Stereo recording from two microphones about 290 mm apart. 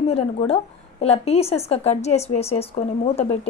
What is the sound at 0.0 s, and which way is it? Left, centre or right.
A woman's voice, centre.